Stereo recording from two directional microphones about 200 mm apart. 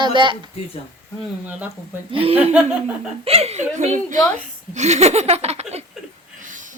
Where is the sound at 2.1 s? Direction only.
30° right (ahead or behind).